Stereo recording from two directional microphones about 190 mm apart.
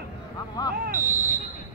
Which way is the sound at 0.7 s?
50° right (ahead or behind).